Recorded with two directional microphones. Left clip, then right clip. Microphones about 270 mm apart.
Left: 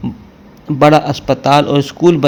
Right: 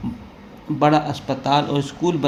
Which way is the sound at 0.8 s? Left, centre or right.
Left.